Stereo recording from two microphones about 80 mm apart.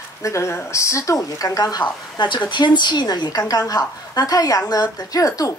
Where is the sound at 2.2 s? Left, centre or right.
Left.